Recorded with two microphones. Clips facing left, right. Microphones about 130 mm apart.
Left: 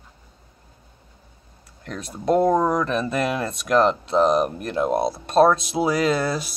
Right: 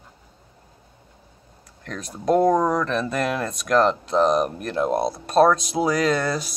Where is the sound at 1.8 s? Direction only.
5° left (ahead or behind).